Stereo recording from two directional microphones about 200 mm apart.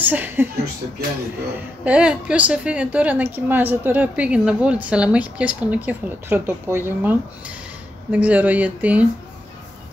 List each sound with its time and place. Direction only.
0.0 s a woman's voice: 10° right (ahead or behind)
1.9 s a woman's voice: 5° right (ahead or behind)